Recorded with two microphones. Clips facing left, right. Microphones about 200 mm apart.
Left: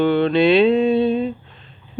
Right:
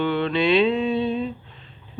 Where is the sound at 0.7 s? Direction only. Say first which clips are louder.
Left 6 dB; 45° left (ahead or behind).